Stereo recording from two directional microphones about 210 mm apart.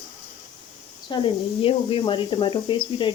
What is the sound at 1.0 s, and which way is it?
Speech, 25° left (ahead or behind).